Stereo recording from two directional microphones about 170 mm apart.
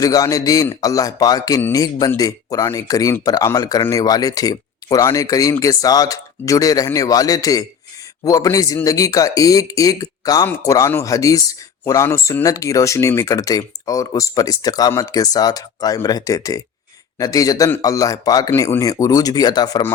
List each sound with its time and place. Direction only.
0.0 s speech: 20° left (ahead or behind)